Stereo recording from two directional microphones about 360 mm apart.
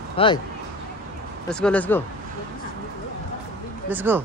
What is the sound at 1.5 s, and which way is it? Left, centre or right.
Speech, centre.